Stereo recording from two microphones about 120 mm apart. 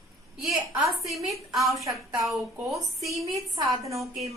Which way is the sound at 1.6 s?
25° right (ahead or behind).